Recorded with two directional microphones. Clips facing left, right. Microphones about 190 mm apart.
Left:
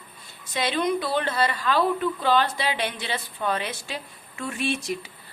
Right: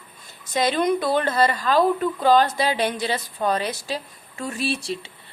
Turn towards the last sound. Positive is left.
turn(degrees=-35)  # may be behind; listen again after turning